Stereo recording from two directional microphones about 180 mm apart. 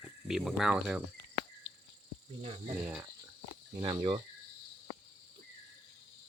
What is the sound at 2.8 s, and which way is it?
Speech, 10° right (ahead or behind).